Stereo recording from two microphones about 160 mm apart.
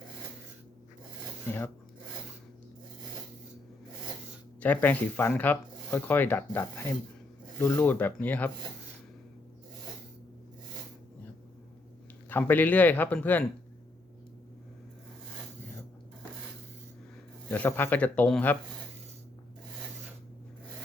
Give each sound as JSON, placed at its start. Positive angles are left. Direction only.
{"t": 4.6, "sound": "speech", "side_deg": 10}
{"t": 12.3, "sound": "speech", "side_deg": 10}
{"t": 17.5, "sound": "speech", "side_deg": 10}